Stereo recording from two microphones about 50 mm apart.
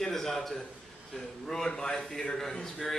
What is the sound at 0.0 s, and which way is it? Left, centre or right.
A man's voice, centre.